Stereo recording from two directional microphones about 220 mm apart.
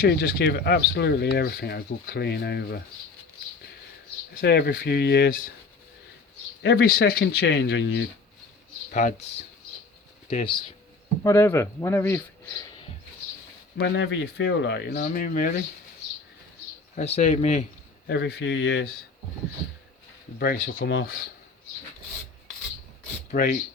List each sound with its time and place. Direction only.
0.0 s speech: 45° left (ahead or behind)
4.4 s speech: 45° left (ahead or behind)
6.6 s speech: 50° left (ahead or behind)
8.9 s speech: 35° left (ahead or behind)
10.2 s speech: 25° left (ahead or behind)
11.2 s speech: 15° left (ahead or behind)
13.7 s speech: 55° left (ahead or behind)
16.9 s speech: 30° left (ahead or behind)
18.1 s speech: 50° left (ahead or behind)
20.7 s speech: 60° left (ahead or behind)
23.3 s speech: 40° left (ahead or behind)